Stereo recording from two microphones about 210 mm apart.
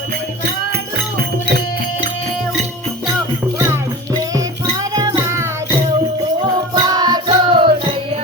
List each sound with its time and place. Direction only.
3.7 s music: 15° right (ahead or behind)
6.7 s music: 20° right (ahead or behind)